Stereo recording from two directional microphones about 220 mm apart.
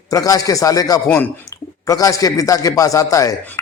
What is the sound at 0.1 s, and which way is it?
Speech, 15° left (ahead or behind).